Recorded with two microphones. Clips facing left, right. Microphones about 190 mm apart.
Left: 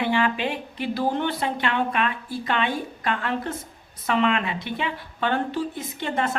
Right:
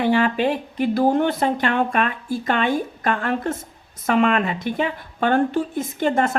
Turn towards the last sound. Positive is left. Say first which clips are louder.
# right 6 dB
turn(degrees=-45)  # may be behind; listen again after turning